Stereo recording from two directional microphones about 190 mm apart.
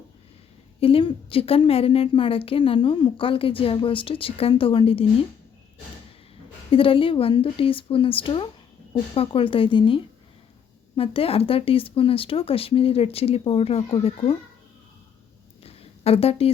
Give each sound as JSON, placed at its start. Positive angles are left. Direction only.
{"t": 0.8, "sound": "a woman's voice", "side_deg": 30}
{"t": 6.7, "sound": "a woman's voice", "side_deg": 30}
{"t": 15.6, "sound": "a sound", "side_deg": 30}